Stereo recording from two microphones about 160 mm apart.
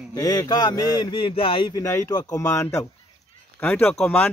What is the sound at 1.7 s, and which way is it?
A man's voice, 20° left (ahead or behind).